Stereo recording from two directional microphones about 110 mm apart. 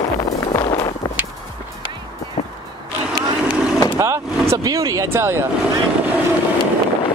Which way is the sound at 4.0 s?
25° right (ahead or behind).